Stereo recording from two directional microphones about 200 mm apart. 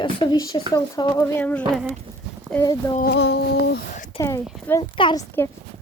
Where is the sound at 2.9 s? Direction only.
50° left (ahead or behind).